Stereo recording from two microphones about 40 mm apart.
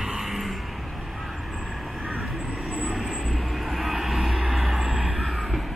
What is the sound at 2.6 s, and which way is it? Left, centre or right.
Vehicle, right.